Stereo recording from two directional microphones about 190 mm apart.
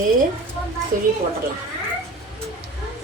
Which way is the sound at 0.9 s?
45° right (ahead or behind).